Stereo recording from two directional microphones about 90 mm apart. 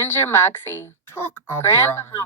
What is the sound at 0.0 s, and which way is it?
Speech, 25° left (ahead or behind).